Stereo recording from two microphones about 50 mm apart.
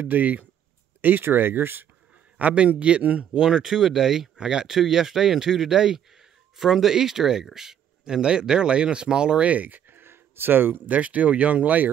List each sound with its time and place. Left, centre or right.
0.0 s speech: right
2.3 s a man's voice: right
10.9 s a man's voice: right